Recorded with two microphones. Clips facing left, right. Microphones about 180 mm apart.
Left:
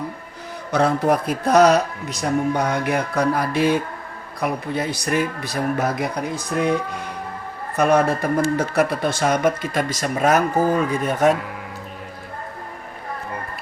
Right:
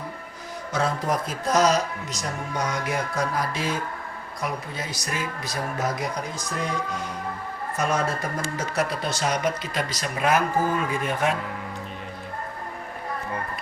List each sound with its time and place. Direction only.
0.7 s speech: 65° left (ahead or behind); by 11.3 s 45° left (ahead or behind)